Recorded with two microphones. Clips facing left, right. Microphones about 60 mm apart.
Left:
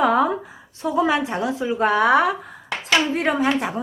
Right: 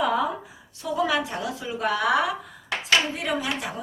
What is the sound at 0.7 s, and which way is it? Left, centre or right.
A woman's voice, left.